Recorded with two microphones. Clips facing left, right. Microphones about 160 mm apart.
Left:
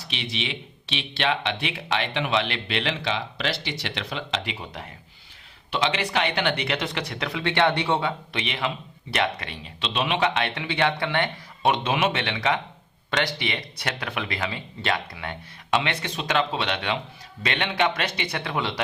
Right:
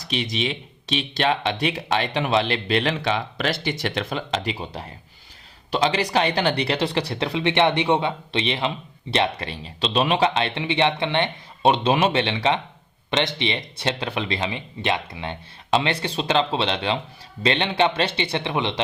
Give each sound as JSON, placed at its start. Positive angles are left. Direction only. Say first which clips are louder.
{"t": 0.0, "sound": "speech", "louder": "right 6 dB", "side_deg": -40}